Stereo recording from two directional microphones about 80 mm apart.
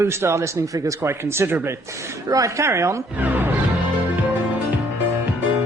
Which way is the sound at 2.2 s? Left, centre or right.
Right.